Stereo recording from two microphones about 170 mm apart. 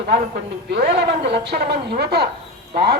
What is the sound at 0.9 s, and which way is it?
Speech, 80° right.